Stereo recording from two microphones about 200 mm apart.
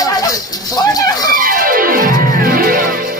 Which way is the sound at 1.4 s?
45° right (ahead or behind).